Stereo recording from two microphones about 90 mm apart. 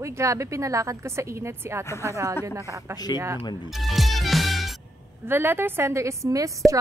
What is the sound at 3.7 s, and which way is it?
Music, centre (ahead or behind).